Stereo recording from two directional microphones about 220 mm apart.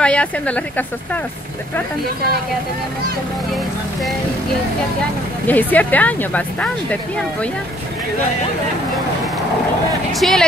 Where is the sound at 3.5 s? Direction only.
Centre (ahead or behind).